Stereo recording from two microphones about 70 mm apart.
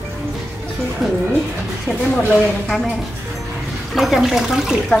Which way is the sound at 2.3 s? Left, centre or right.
Centre.